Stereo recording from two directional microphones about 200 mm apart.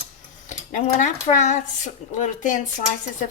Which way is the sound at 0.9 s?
40° left (ahead or behind).